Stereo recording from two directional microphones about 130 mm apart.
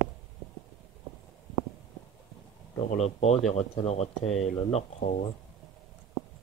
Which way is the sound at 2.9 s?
55° left (ahead or behind).